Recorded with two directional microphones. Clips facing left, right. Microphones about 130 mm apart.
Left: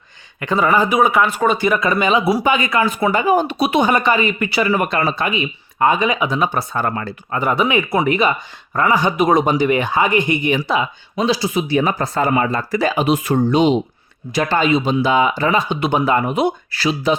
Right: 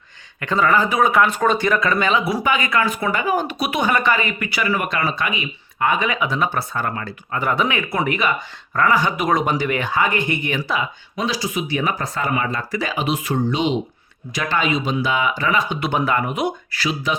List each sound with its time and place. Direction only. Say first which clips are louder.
0.3 s speech: left 2 dB; 15° left (ahead or behind)
6.8 s speech: left 4 dB; 35° left (ahead or behind)
7.3 s speech: left 4 dB; 15° left (ahead or behind); by 13.7 s 45° left (ahead or behind)
14.3 s speech: left 5 dB; 35° left (ahead or behind)